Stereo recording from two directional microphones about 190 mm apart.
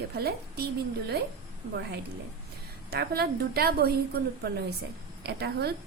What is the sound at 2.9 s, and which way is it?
Speech, 55° right (ahead or behind).